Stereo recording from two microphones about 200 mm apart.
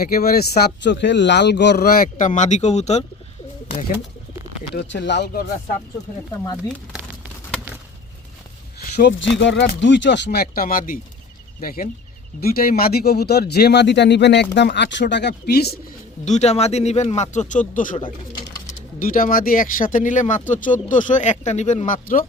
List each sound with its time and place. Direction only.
0.0 s speech: 50° left (ahead or behind)
4.7 s speech: 55° left (ahead or behind)
9.4 s speech: 65° left (ahead or behind)
16.2 s speech: 35° left (ahead or behind)
18.9 s speech: 45° left (ahead or behind)